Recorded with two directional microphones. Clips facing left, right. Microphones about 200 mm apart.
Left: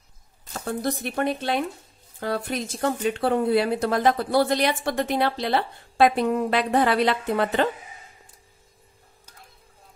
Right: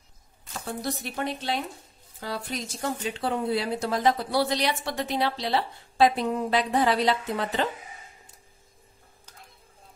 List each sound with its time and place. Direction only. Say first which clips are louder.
0.5 s speech: left 5 dB; 50° left (ahead or behind)